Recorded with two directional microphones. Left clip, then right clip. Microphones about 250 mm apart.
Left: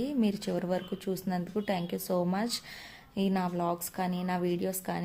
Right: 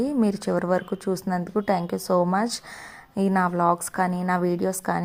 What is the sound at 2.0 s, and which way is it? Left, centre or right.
Speech, centre.